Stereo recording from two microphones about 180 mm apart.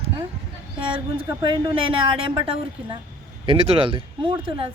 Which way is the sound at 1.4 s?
25° right (ahead or behind).